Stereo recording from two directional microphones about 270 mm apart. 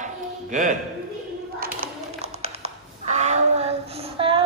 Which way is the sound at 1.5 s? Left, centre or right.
Right.